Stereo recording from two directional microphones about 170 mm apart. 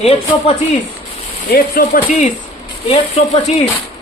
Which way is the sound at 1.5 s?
60° left (ahead or behind).